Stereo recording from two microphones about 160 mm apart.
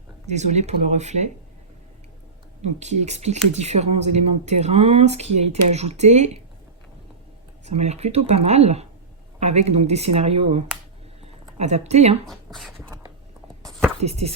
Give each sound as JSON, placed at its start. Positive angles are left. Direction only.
{"t": 0.3, "sound": "speech", "side_deg": -45}
{"t": 2.6, "sound": "speech", "side_deg": -45}
{"t": 7.6, "sound": "speech", "side_deg": -45}
{"t": 11.2, "sound": "a sound", "side_deg": -40}
{"t": 12.3, "sound": "speech", "side_deg": 0}
{"t": 14.0, "sound": "speech", "side_deg": -40}